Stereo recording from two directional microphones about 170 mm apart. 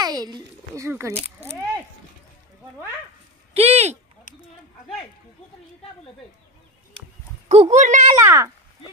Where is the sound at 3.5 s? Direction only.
40° right (ahead or behind).